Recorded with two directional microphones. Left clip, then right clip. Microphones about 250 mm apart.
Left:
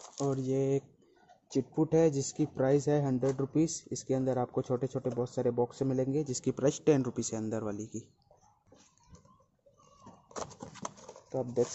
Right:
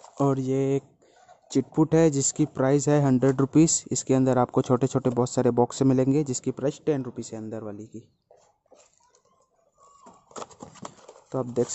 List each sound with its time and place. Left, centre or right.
0.2 s speech: right; by 8.1 s centre
10.3 s a sound: centre
11.2 s speech: right